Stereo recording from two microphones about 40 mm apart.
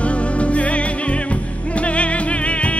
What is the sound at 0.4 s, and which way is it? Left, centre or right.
Music, left.